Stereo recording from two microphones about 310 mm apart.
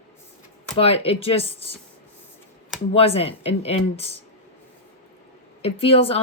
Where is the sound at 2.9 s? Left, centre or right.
Centre.